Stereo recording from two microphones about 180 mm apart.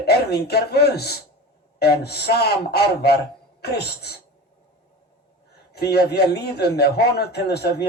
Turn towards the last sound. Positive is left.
turn(degrees=65)  # may be behind; listen again after turning